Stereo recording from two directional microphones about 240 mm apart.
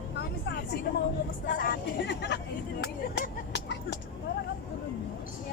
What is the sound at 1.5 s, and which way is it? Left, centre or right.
Speech, left.